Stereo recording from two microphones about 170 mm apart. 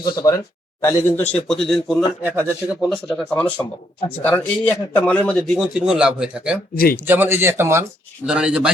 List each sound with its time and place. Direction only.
0.0 s speech: 20° left (ahead or behind)
1.3 s speech: 5° left (ahead or behind)
2.2 s speech: 15° right (ahead or behind)
2.9 s speech: 5° left (ahead or behind)